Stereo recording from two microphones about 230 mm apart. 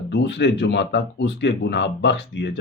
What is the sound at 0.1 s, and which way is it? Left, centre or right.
Speech, left.